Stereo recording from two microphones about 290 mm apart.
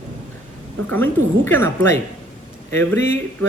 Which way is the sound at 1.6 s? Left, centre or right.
Right.